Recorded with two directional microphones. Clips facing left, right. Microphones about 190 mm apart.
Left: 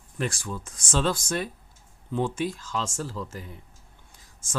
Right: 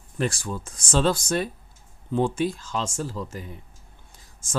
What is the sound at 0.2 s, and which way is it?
Speech, 35° right (ahead or behind).